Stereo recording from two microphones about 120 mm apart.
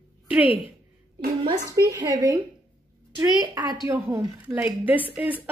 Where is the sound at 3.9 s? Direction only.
15° right (ahead or behind).